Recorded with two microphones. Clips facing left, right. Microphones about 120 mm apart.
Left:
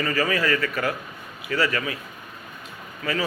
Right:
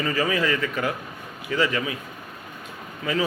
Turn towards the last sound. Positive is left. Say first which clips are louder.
# right 2 dB
turn(degrees=-15)  # may be behind; listen again after turning